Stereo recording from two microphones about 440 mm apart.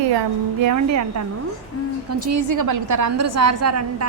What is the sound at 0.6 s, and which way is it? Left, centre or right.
A woman's voice, right.